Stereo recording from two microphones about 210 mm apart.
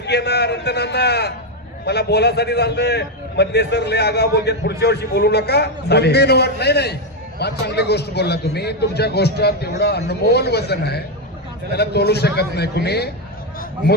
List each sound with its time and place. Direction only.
0.0 s a man's voice: 50° left (ahead or behind)